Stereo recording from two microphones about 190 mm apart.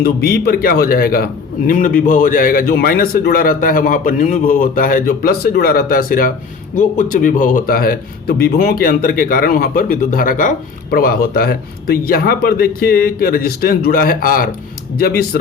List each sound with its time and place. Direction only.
0.0 s a man's voice: 55° left (ahead or behind)